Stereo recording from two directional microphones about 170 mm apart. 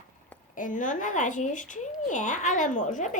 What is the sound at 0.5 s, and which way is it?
Speech, 50° left (ahead or behind).